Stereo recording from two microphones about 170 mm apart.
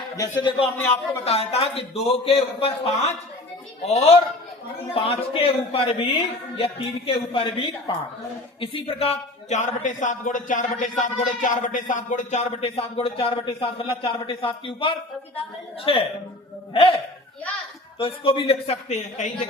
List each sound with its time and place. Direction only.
0.2 s a man's voice: 25° left (ahead or behind)
18.0 s a man's voice: 30° left (ahead or behind)